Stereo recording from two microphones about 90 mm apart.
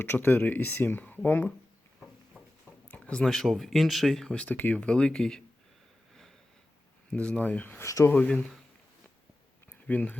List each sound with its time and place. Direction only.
0.0 s speech: 20° left (ahead or behind)
2.0 s a sound: 5° left (ahead or behind)
2.9 s speech: 10° left (ahead or behind)
7.1 s speech: 10° left (ahead or behind)
7.8 s speech: 35° left (ahead or behind)
8.1 s speech: 15° left (ahead or behind)
9.8 s speech: 15° left (ahead or behind)